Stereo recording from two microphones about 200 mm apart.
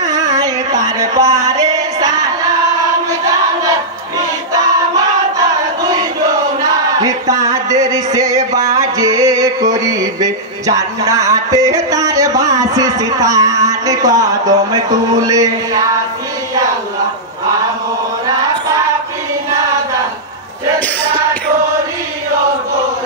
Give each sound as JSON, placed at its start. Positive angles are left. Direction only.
{"t": 0.1, "sound": "music", "side_deg": -20}
{"t": 7.0, "sound": "music", "side_deg": -15}